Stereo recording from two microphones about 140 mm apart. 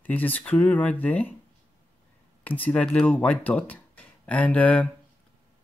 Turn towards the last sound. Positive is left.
turn(degrees=10)  # may be behind; listen again after turning